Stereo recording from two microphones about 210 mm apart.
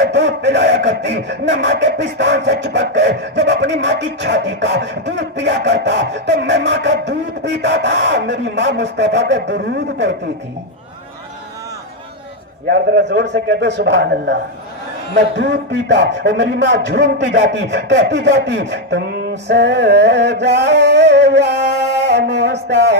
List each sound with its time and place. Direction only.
0.0 s a man's voice: 55° right (ahead or behind)
12.6 s a man's voice: 55° right (ahead or behind)